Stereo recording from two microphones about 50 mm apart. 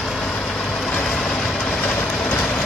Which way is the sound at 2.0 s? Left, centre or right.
Centre.